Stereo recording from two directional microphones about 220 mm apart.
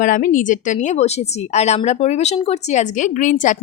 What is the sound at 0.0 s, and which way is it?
A woman's voice, 35° left (ahead or behind).